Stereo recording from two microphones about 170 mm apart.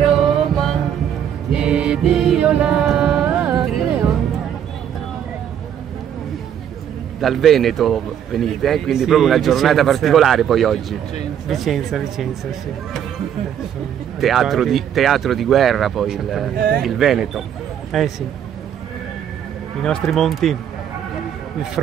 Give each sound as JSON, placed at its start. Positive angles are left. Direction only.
{"t": 0.2, "sound": "music", "side_deg": 0}
{"t": 7.2, "sound": "speech", "side_deg": 0}
{"t": 14.2, "sound": "speech", "side_deg": 0}
{"t": 16.5, "sound": "speech", "side_deg": -60}
{"t": 16.8, "sound": "speech", "side_deg": 0}
{"t": 19.8, "sound": "speech", "side_deg": 5}
{"t": 21.8, "sound": "speech", "side_deg": -5}